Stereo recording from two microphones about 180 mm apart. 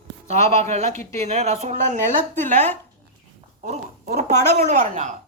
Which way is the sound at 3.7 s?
40° right (ahead or behind).